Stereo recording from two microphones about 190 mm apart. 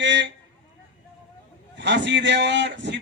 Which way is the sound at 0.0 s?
70° right (ahead or behind).